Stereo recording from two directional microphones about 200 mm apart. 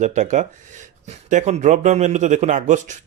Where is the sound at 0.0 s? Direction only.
35° right (ahead or behind).